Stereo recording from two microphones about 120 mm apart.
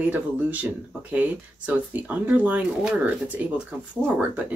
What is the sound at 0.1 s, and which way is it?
Speech, 10° right (ahead or behind).